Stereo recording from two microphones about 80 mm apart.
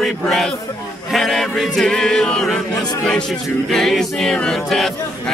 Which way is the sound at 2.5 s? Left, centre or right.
Centre.